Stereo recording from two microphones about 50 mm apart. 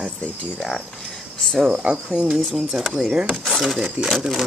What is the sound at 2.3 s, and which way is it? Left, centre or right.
Speech, centre.